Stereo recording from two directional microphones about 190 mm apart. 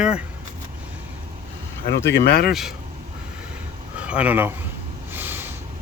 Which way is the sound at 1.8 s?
55° left (ahead or behind).